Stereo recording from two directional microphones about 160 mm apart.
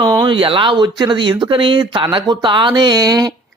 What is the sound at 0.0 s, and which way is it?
Speech, 30° right (ahead or behind).